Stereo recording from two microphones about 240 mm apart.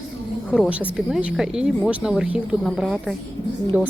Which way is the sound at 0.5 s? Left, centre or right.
Centre.